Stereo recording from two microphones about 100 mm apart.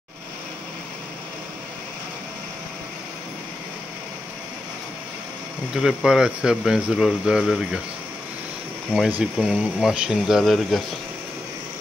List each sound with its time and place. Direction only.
5.8 s speech: 5° right (ahead or behind)
9.2 s speech: 5° right (ahead or behind)